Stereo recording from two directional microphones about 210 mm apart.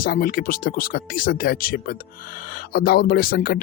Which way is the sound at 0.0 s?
45° left (ahead or behind).